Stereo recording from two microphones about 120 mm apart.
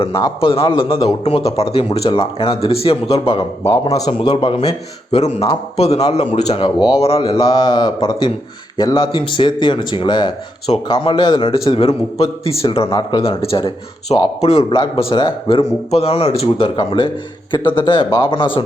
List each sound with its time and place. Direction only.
0.3 s a man's voice: 50° left (ahead or behind)
3.6 s speech: 25° left (ahead or behind); by 4.7 s 45° left (ahead or behind)
5.1 s speech: 65° left (ahead or behind)
7.5 s a man's voice: 35° left (ahead or behind); by 12.9 s 50° left (ahead or behind)
12.9 s speech: 35° left (ahead or behind)
13.2 s a man's voice: 55° left (ahead or behind)
15.6 s a man's voice: 60° left (ahead or behind); by 18.6 s 45° left (ahead or behind)